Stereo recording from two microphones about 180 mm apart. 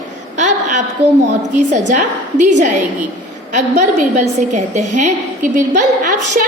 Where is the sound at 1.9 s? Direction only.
40° right (ahead or behind).